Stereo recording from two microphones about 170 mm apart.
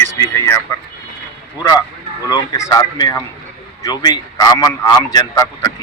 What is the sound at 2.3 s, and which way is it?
A man's voice, 20° left (ahead or behind).